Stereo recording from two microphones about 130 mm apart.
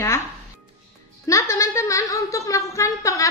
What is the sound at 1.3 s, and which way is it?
A woman's voice, 25° left (ahead or behind).